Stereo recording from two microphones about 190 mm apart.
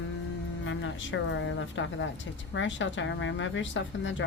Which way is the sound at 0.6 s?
80° left.